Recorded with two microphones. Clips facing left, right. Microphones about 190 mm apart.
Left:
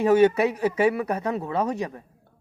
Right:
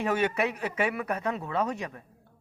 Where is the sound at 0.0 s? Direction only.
30° left (ahead or behind).